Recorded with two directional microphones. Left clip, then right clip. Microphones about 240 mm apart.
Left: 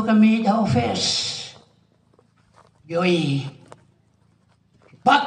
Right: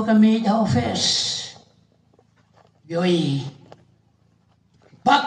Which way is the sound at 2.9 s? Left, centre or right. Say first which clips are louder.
Left 1 dB; right.